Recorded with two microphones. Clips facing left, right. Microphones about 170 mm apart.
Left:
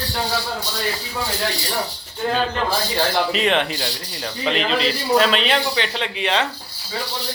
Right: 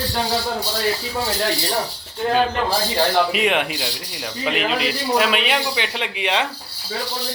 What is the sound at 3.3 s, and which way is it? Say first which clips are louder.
Speech: even; 10° right (ahead or behind).